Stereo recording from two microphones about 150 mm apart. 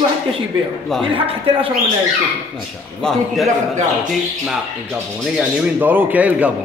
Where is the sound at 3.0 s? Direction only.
Centre (ahead or behind).